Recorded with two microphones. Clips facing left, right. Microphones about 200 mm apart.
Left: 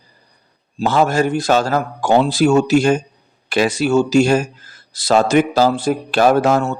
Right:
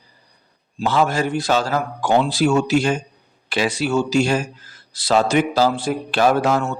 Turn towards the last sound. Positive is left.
turn(degrees=40)  # may be behind; listen again after turning